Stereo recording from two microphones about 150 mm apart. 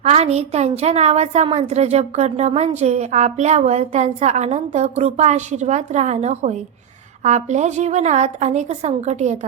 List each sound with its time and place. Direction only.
0.0 s a woman's voice: 45° right (ahead or behind)